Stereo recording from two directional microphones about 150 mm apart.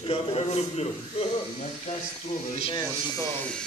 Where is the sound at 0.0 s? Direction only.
40° left (ahead or behind).